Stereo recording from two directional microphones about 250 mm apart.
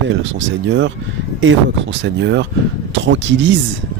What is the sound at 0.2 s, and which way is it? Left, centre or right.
Speech, right.